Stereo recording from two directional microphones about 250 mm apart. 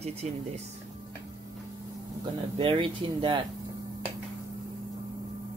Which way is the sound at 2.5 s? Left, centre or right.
Centre.